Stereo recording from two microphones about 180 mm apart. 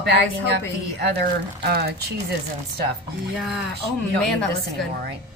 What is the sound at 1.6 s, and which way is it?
Speech, 60° right (ahead or behind).